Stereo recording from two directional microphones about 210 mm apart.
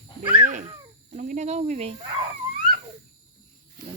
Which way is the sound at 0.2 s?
25° right (ahead or behind).